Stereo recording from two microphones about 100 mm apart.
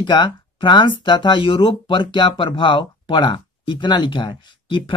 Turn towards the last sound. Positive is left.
turn(degrees=55)  # may be behind; listen again after turning